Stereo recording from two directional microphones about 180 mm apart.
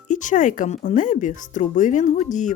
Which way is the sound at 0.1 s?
45° left (ahead or behind).